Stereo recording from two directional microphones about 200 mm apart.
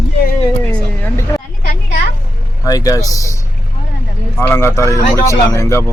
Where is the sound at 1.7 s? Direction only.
40° left (ahead or behind).